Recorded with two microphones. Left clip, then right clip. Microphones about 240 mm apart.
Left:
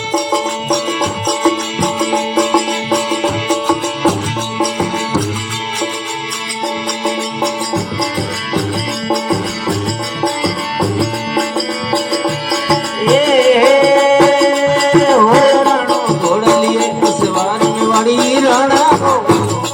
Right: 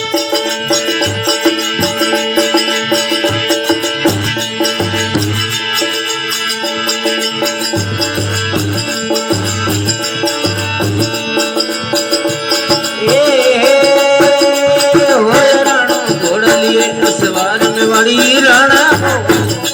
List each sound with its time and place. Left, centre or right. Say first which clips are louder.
1.3 s music: right 2 dB; left
12.1 s music: right 2 dB; left